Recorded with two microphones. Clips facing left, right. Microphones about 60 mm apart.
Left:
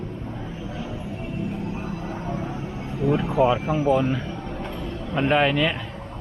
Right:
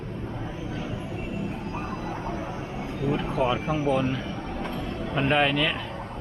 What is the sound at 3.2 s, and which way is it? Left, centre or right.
Speech, centre.